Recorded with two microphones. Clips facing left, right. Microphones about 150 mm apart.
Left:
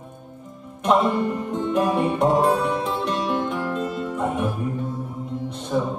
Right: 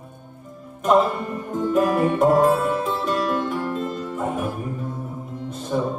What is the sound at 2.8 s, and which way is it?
Music, centre (ahead or behind).